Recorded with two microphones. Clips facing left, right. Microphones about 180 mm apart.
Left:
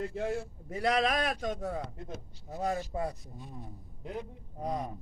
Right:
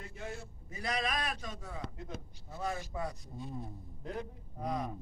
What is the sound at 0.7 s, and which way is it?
A man's voice, 85° left.